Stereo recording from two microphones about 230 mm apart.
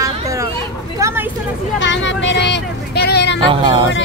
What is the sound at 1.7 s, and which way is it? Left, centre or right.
Speech, left.